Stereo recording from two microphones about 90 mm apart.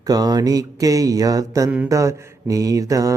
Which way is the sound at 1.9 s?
35° right (ahead or behind).